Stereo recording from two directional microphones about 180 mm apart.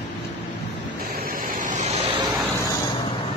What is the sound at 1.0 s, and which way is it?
Waves, 55° right (ahead or behind).